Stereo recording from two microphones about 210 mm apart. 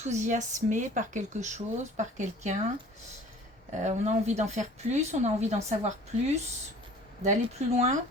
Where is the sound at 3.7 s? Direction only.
35° right (ahead or behind).